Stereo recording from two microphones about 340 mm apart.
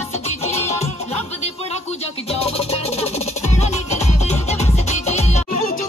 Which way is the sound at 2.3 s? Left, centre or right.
Centre.